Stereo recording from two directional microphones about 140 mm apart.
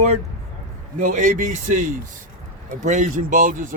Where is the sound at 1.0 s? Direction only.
65° right (ahead or behind).